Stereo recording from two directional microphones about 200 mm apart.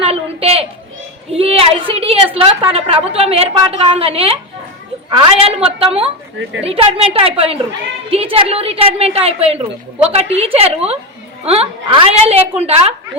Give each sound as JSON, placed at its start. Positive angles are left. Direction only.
{"t": 0.0, "sound": "a sound", "side_deg": -30}
{"t": 1.3, "sound": "a woman's voice", "side_deg": -30}
{"t": 6.4, "sound": "speech", "side_deg": -65}
{"t": 6.7, "sound": "a woman's voice", "side_deg": -30}